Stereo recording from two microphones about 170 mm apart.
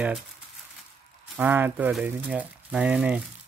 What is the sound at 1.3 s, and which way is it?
Speech, 10° right (ahead or behind).